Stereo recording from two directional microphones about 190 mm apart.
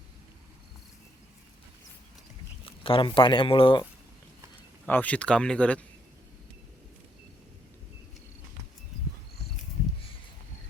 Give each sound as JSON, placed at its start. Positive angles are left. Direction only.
{"t": 2.6, "sound": "speech", "side_deg": 30}
{"t": 4.9, "sound": "speech", "side_deg": 10}